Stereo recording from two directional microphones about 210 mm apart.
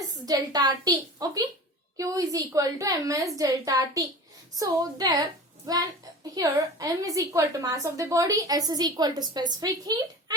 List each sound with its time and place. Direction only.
0.3 s a woman's voice: 20° right (ahead or behind)